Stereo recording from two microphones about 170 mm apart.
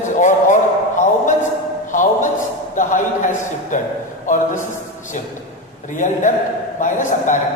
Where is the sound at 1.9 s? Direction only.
50° left (ahead or behind).